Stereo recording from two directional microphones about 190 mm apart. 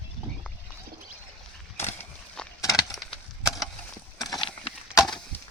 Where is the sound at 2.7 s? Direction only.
Centre (ahead or behind).